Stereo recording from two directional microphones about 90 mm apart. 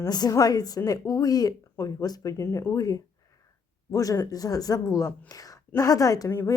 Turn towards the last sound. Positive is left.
turn(degrees=40)  # may be behind; listen again after turning